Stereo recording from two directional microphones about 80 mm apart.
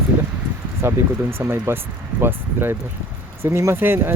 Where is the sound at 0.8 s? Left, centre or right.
Right.